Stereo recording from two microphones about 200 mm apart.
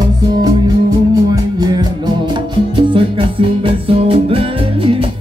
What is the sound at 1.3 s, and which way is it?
Music, 20° right (ahead or behind).